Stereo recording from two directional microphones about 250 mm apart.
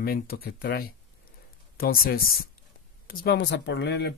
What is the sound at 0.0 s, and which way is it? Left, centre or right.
Speech, left.